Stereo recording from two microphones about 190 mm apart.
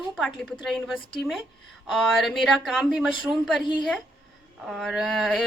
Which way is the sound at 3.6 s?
25° left (ahead or behind).